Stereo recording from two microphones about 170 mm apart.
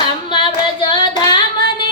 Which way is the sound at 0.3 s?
30° left (ahead or behind).